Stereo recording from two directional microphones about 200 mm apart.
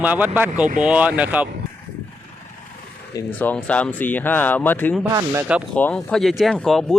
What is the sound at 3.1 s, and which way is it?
Speech, 10° left (ahead or behind).